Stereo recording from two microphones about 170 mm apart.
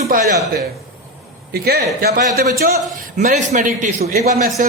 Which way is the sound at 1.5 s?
65° right (ahead or behind).